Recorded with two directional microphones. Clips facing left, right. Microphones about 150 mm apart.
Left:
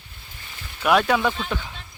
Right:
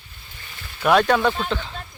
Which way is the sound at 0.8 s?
5° left (ahead or behind).